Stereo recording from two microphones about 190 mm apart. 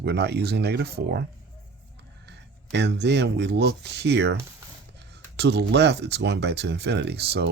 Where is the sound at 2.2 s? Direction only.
65° right (ahead or behind).